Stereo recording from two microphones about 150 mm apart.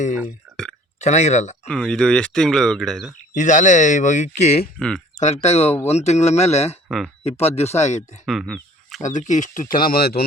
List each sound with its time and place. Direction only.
0.9 s speech: 50° left (ahead or behind)
1.6 s speech: 5° left (ahead or behind)
3.3 s speech: 55° left (ahead or behind)
4.8 s speech: 5° left (ahead or behind)
5.2 s speech: 50° left (ahead or behind)
8.3 s a sound: centre (ahead or behind)
9.0 s speech: 55° left (ahead or behind); by 10.2 s 90° left